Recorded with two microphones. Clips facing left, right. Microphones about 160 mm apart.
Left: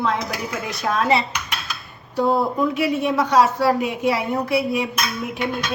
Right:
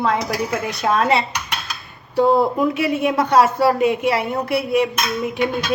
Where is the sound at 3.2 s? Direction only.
55° right (ahead or behind).